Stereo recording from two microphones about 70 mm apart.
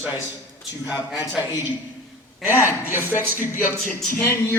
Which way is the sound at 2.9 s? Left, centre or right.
Right.